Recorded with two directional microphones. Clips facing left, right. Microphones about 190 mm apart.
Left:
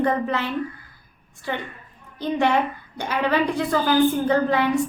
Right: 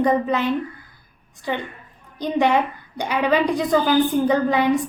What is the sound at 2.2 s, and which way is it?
A woman's voice, 15° right (ahead or behind).